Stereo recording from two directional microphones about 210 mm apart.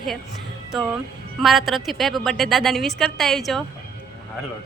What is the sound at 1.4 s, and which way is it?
A woman's voice, centre (ahead or behind).